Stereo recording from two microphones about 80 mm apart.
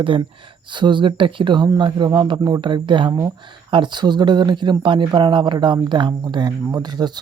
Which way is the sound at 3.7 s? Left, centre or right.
Right.